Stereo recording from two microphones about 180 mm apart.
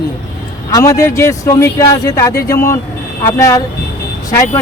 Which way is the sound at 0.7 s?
20° left (ahead or behind).